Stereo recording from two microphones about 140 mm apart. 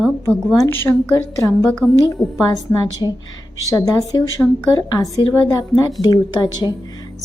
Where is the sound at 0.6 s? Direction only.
15° left (ahead or behind).